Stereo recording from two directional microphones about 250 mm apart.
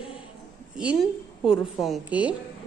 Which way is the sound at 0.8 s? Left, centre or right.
Centre.